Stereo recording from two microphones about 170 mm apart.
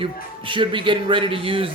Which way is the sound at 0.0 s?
30° right (ahead or behind).